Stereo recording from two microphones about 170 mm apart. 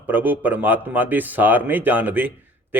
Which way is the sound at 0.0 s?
10° right (ahead or behind).